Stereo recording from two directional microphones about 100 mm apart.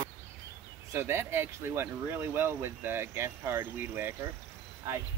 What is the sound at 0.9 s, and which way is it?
Speech, 25° right (ahead or behind).